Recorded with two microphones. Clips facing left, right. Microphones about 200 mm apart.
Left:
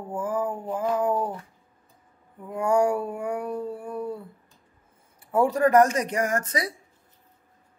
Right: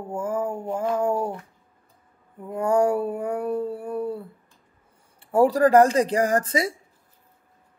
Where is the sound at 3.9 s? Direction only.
25° right (ahead or behind).